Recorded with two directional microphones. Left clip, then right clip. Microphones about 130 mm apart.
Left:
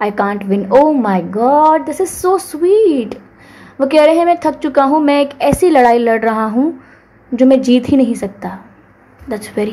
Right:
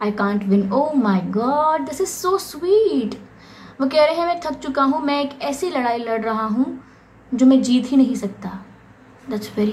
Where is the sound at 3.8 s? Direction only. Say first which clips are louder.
Left 7 dB; 50° left (ahead or behind).